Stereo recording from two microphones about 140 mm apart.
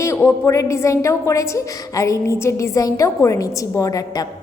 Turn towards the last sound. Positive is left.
turn(degrees=25)  # may be behind; listen again after turning